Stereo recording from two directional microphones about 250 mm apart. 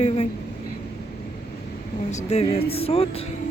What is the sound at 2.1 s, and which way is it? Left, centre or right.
Speech, left.